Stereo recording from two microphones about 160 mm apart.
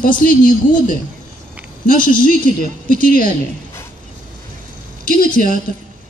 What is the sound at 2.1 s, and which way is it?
A man's voice, 60° left (ahead or behind).